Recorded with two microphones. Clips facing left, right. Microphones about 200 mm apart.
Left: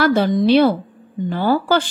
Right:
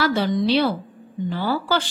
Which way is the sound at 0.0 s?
55° left (ahead or behind).